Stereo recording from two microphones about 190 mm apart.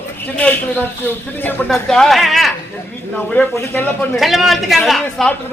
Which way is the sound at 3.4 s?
10° left (ahead or behind).